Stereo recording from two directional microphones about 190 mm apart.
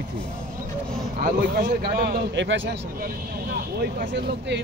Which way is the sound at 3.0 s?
55° right (ahead or behind).